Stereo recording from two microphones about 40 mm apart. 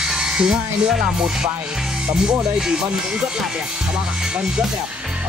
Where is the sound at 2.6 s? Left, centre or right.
Centre.